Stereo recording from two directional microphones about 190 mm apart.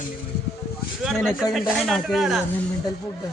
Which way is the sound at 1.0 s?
Centre (ahead or behind).